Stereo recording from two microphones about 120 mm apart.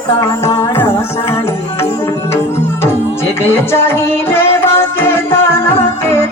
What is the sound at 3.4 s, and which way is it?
Music, 20° left (ahead or behind).